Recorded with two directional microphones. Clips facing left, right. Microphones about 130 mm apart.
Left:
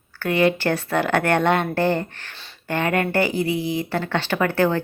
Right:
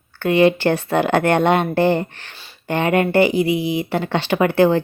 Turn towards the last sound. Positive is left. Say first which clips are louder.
# right 5 dB
turn(degrees=-15)  # may be behind; listen again after turning